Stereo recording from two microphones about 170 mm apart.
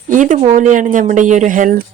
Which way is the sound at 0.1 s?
50° right (ahead or behind).